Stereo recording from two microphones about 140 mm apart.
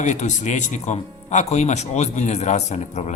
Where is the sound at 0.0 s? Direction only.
60° left (ahead or behind).